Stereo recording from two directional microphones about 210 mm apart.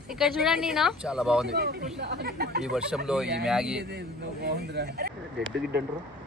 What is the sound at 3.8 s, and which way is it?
Speech, 50° right (ahead or behind).